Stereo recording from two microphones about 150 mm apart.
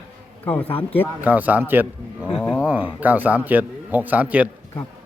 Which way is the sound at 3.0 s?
10° right (ahead or behind).